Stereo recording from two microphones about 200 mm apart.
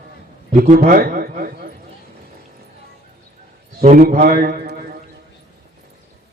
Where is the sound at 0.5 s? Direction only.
40° right (ahead or behind).